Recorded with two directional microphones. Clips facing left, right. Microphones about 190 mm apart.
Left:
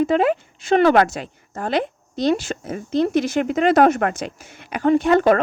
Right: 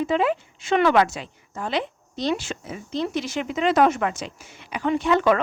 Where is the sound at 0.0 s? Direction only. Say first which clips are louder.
Left 4 dB; 50° left (ahead or behind).